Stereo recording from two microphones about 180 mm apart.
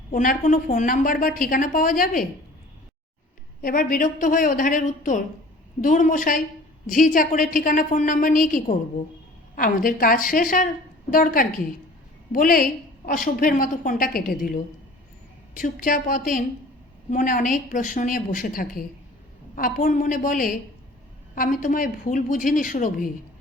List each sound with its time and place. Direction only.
0.1 s a woman's voice: 50° left (ahead or behind)
3.6 s a woman's voice: 50° left (ahead or behind)